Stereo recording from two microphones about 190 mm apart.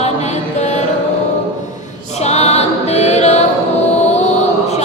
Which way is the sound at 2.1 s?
35° left (ahead or behind).